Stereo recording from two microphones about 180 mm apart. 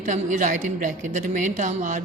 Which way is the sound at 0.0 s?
45° right (ahead or behind).